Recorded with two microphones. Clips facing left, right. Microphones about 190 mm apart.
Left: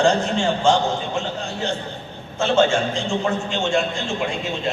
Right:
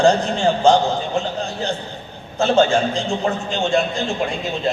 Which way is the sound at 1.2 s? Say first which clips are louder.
Right 3 dB; 35° right (ahead or behind).